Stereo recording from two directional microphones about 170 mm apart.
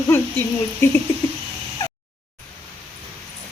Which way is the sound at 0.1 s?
15° left (ahead or behind).